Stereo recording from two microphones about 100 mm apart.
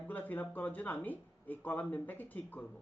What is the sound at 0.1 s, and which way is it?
Speech, 20° left (ahead or behind).